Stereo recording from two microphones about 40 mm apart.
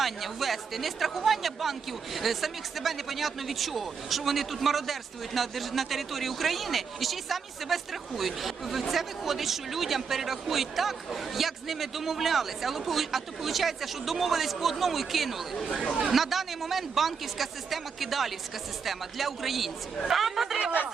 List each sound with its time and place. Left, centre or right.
0.0 s speech: centre
20.6 s speech: right